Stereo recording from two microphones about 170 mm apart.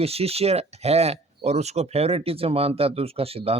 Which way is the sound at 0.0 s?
35° right (ahead or behind).